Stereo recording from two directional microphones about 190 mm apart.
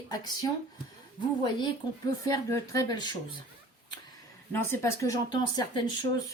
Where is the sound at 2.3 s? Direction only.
15° left (ahead or behind).